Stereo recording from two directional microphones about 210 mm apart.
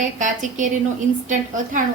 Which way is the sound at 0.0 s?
35° right (ahead or behind).